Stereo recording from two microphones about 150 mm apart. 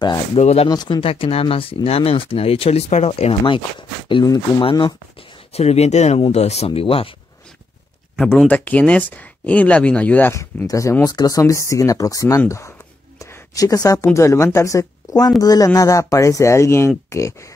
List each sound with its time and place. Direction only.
0.4 s speech: 45° left (ahead or behind)
0.7 s speech: 30° left (ahead or behind)
5.5 s speech: 45° left (ahead or behind)
8.5 s speech: 10° left (ahead or behind)